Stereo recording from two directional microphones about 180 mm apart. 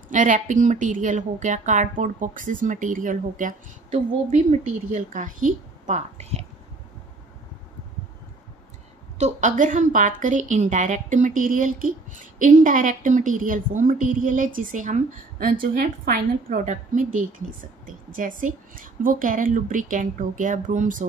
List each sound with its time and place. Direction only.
0.1 s a woman's voice: 45° right (ahead or behind)
9.2 s a woman's voice: 45° right (ahead or behind)